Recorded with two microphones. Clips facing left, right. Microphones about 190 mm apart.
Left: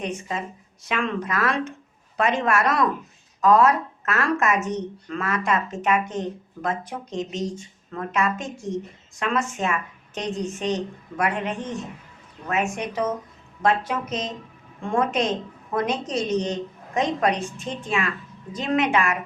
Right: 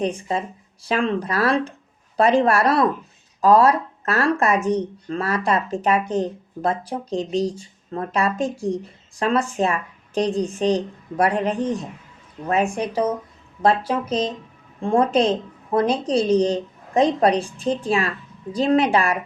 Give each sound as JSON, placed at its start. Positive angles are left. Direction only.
{"t": 0.0, "sound": "speech", "side_deg": -35}